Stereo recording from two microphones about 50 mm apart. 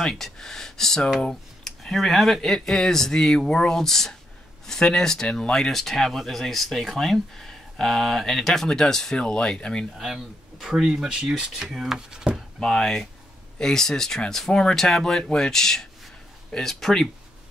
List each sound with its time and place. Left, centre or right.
0.0 s speech: centre
9.9 s speech: centre
12.5 s speech: centre